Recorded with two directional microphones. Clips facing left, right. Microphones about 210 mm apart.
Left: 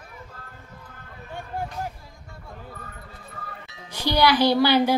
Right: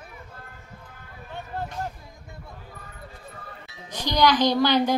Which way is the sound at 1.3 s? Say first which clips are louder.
Left 1 dB; 10° left (ahead or behind).